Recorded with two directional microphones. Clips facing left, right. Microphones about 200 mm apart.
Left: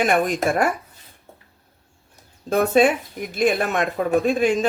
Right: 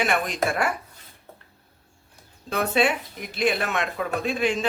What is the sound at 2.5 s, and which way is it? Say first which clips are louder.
Speech: left 6 dB; 45° left (ahead or behind).